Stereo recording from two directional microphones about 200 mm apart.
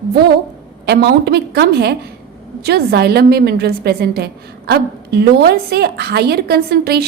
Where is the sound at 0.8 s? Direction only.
55° right (ahead or behind).